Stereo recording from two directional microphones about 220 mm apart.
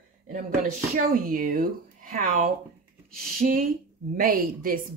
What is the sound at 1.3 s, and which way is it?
Speech, 40° right (ahead or behind).